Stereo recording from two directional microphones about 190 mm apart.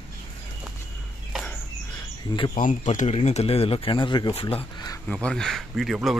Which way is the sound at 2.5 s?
40° left (ahead or behind).